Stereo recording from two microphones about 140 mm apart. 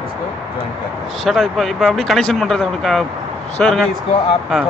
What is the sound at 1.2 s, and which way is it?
Speech, centre (ahead or behind).